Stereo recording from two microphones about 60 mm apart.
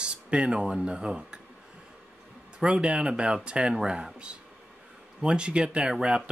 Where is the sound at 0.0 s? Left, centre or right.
Centre.